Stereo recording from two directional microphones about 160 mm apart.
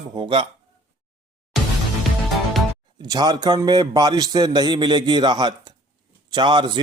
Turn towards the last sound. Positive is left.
turn(degrees=-30)  # may be behind; listen again after turning